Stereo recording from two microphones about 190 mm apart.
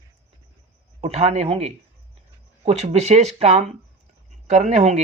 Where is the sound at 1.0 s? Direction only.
35° right (ahead or behind).